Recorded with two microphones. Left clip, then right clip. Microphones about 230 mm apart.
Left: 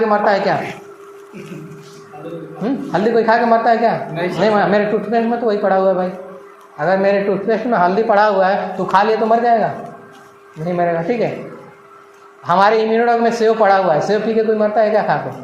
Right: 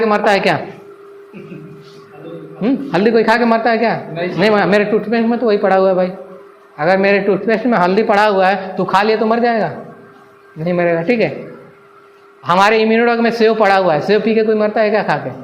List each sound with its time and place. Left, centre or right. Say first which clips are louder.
0.1 s a man's voice: right 2 dB; right
2.6 s a man's voice: right 3 dB; right
12.5 s a man's voice: right 1 dB; right